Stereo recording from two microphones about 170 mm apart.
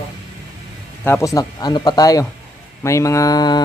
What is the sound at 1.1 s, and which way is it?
Speech, 15° left (ahead or behind).